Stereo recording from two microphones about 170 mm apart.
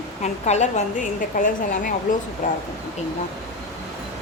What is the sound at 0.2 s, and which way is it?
A woman's voice, 40° left (ahead or behind).